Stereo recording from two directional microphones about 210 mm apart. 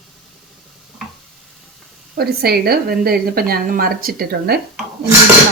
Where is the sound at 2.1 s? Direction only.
50° right (ahead or behind).